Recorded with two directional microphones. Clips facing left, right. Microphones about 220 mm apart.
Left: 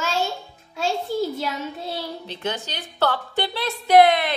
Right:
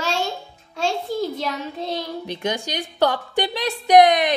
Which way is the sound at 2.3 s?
15° right (ahead or behind).